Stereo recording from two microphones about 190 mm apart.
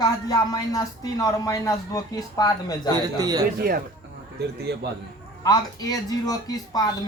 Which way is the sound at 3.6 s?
50° right (ahead or behind).